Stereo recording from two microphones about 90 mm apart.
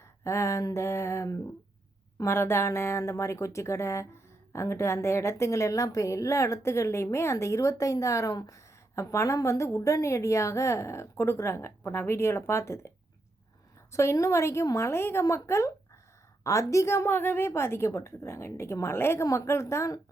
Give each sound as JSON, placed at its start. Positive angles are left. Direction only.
{"t": 0.3, "sound": "speech", "side_deg": 30}
{"t": 13.9, "sound": "speech", "side_deg": 35}